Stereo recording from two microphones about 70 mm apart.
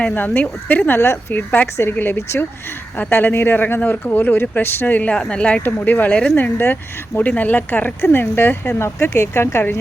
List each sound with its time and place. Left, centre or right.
0.0 s speech: left
5.6 s speech: left
6.3 s speech: left